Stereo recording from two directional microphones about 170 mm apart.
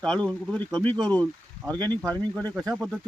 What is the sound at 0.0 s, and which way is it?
Speech, 5° left (ahead or behind).